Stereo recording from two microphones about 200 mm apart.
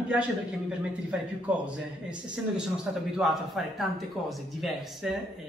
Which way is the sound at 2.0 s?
5° right (ahead or behind).